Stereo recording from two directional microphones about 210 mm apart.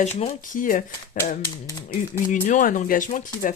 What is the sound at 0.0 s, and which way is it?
Speech, 35° left (ahead or behind).